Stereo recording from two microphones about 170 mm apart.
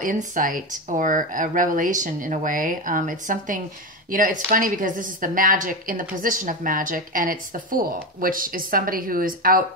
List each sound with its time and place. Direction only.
0.0 s speech: 50° right (ahead or behind)